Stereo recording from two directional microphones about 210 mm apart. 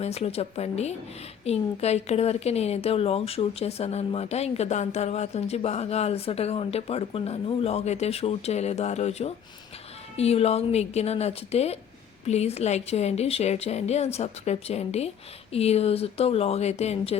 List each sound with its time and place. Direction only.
0.0 s a woman's voice: 30° left (ahead or behind)